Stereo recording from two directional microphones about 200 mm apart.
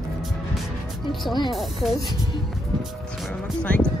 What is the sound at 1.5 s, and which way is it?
Speech, centre (ahead or behind).